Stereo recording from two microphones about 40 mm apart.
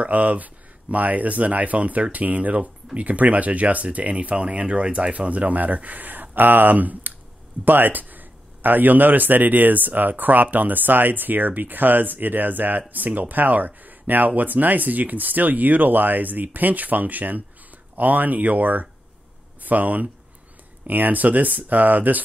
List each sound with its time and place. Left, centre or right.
0.0 s speech: right